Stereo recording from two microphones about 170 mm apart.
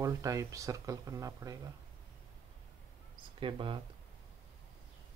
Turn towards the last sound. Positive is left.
turn(degrees=-30)  # may be behind; listen again after turning